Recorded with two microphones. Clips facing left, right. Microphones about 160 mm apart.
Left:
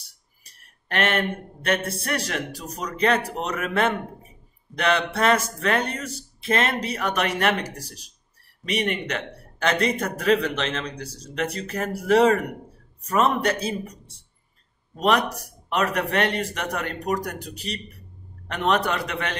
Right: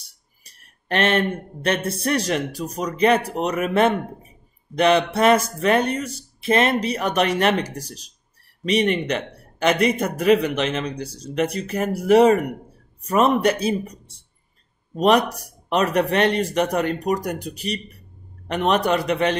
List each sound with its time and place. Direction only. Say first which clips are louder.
0.8 s a man's voice: right 4 dB; 25° right (ahead or behind)
15.0 s a man's voice: right 4 dB; 20° right (ahead or behind)